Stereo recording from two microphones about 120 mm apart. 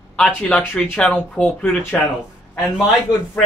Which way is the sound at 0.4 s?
15° left (ahead or behind).